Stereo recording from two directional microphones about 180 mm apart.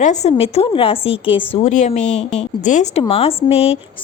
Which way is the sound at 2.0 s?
5° left (ahead or behind).